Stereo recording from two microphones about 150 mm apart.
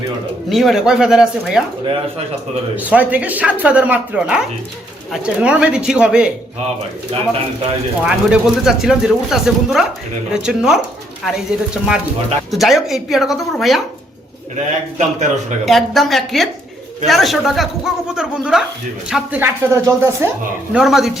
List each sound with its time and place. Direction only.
0.5 s speech: centre (ahead or behind)
2.7 s speech: 10° right (ahead or behind)
8.0 s speech: 5° right (ahead or behind)
14.9 s speech: 55° right (ahead or behind)
15.6 s speech: centre (ahead or behind); by 20.3 s 20° right (ahead or behind)
20.7 s speech: centre (ahead or behind)